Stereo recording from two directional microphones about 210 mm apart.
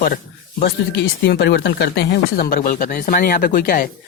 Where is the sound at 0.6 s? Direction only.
50° left (ahead or behind).